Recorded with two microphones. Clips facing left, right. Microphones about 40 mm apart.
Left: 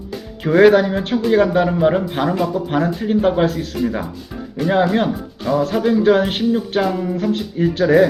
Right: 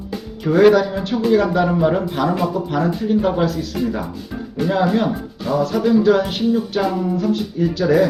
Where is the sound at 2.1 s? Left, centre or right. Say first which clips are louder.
Even; left.